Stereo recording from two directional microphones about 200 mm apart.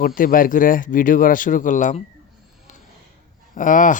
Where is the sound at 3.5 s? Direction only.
40° left (ahead or behind).